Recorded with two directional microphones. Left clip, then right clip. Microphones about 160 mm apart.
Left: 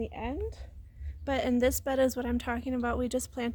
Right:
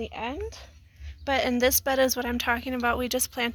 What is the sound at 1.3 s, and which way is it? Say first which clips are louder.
A woman's voice: right 4 dB; 15° right (ahead or behind).